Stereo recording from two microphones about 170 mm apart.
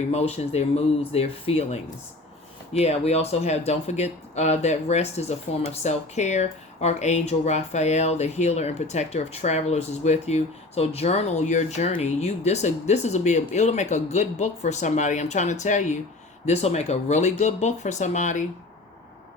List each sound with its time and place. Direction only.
0.1 s speech: 40° left (ahead or behind)